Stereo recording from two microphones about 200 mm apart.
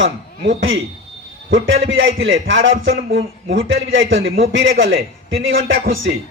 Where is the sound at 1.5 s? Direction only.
75° right (ahead or behind).